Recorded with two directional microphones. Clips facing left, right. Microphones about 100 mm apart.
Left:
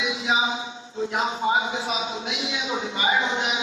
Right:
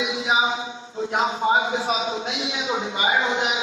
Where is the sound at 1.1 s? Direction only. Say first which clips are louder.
Right 3 dB; 30° right (ahead or behind).